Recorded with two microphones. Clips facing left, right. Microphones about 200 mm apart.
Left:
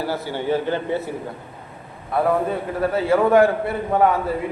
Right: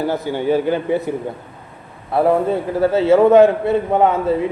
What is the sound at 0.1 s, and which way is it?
A man's voice, 15° right (ahead or behind).